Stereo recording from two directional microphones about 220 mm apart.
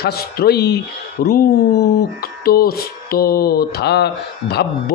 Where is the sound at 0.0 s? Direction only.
45° left (ahead or behind).